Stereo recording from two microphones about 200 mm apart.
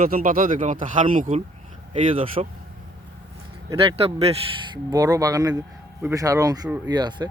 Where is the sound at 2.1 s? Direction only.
30° right (ahead or behind).